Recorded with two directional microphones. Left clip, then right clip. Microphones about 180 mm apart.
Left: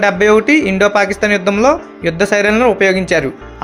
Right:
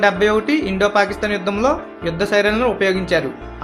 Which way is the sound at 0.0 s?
40° left (ahead or behind).